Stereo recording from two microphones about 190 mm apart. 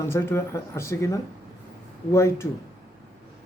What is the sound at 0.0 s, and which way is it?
Speech, 10° left (ahead or behind).